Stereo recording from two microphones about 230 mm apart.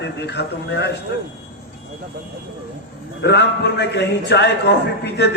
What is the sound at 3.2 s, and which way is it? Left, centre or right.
A man's voice, left.